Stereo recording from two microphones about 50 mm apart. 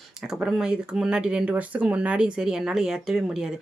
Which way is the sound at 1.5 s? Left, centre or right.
Right.